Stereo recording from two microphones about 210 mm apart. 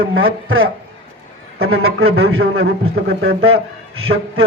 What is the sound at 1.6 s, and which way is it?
Speech, 80° right.